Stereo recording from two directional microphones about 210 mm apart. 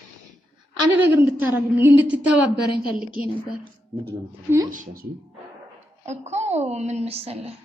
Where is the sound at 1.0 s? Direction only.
10° right (ahead or behind).